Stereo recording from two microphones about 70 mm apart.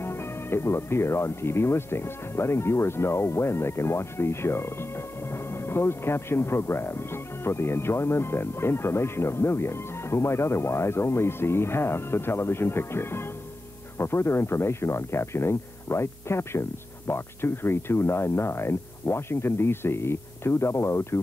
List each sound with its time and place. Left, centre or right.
0.0 s speech: left